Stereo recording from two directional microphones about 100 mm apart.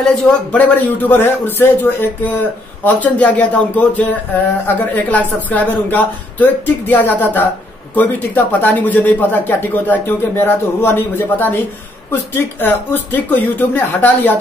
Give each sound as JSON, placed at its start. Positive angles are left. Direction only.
{"t": 0.0, "sound": "speech", "side_deg": 15}